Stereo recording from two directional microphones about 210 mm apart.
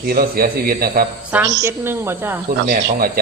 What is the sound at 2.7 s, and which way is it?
Speech, 45° right (ahead or behind).